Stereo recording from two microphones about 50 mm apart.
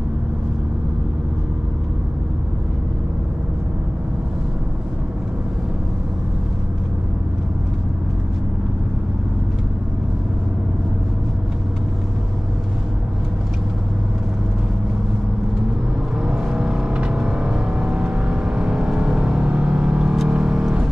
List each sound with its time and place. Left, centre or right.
16.2 s vehicle: centre